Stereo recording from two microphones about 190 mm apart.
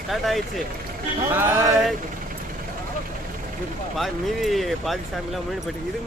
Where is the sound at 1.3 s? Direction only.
10° right (ahead or behind).